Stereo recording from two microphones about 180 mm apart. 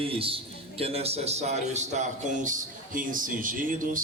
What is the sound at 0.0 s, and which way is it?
A man's voice, 30° right (ahead or behind).